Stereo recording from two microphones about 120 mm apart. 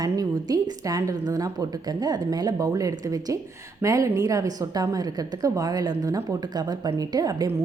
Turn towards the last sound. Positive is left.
turn(degrees=-30)  # may be behind; listen again after turning